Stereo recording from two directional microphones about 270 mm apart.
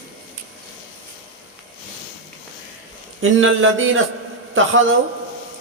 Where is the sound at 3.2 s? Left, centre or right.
Right.